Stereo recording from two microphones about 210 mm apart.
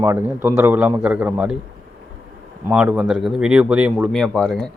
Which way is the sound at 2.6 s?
5° right (ahead or behind).